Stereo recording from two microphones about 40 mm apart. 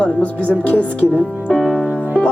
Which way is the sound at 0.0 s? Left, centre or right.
Left.